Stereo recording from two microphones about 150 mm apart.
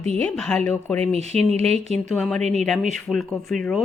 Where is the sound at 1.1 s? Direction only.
45° right (ahead or behind).